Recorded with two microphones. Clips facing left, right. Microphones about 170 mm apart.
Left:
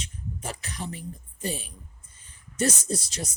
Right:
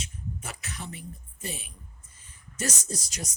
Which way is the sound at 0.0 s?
30° left (ahead or behind).